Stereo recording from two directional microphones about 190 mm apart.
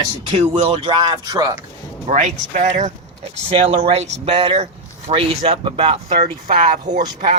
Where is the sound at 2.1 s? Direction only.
40° right (ahead or behind).